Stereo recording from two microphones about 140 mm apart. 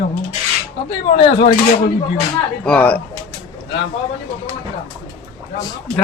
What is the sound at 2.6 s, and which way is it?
Speech, 10° left (ahead or behind).